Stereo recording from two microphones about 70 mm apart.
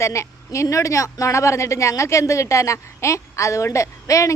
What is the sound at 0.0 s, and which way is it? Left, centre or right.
A woman's voice, left.